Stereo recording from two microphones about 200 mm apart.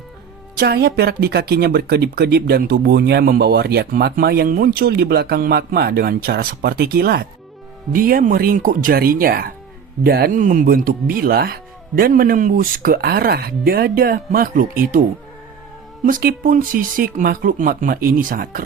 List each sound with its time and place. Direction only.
0.6 s speech: 50° right (ahead or behind)
16.0 s speech: 45° right (ahead or behind)